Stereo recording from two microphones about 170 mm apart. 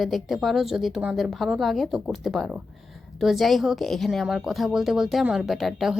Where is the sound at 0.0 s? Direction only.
Centre (ahead or behind).